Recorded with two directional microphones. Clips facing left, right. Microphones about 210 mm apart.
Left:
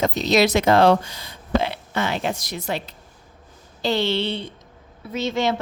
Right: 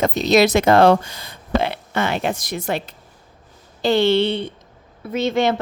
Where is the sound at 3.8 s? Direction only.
55° right (ahead or behind).